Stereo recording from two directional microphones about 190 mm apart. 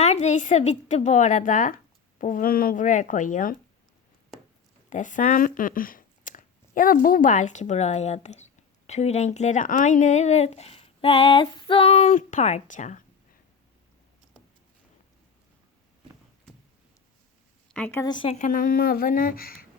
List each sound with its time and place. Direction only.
0.0 s speech: 35° left (ahead or behind)
4.9 s speech: 40° left (ahead or behind)
17.7 s speech: 10° left (ahead or behind)
18.0 s speech: 25° left (ahead or behind)
18.3 s speech: 45° left (ahead or behind)